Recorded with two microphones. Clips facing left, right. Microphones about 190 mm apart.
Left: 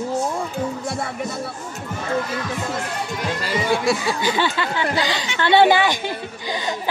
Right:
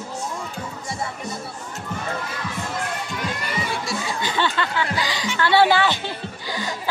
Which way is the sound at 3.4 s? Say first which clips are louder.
Left 7 dB; 90° left.